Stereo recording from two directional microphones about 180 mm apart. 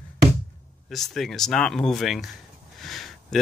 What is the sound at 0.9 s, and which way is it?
Speech, centre (ahead or behind).